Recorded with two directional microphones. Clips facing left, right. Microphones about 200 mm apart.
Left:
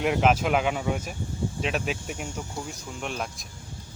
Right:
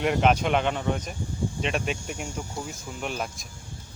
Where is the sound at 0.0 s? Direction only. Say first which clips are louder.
Even; centre (ahead or behind).